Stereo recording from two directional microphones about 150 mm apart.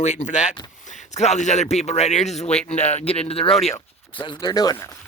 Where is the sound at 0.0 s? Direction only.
50° left (ahead or behind).